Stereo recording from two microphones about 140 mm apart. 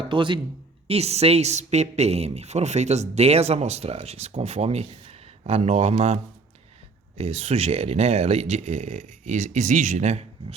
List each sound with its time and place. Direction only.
0.1 s speech: 35° right (ahead or behind)
0.9 s a woman's voice: 50° right (ahead or behind)
7.2 s a woman's voice: 50° right (ahead or behind)